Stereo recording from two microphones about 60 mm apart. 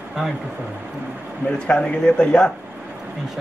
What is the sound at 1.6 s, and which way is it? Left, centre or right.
Speech, centre.